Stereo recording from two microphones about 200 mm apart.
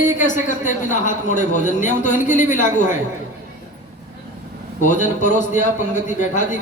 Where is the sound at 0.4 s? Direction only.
40° left (ahead or behind).